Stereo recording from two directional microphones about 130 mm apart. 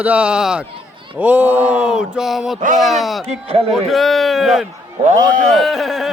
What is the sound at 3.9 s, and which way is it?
Speech, centre (ahead or behind).